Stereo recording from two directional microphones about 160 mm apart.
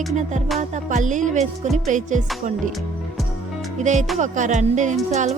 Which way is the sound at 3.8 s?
50° right (ahead or behind).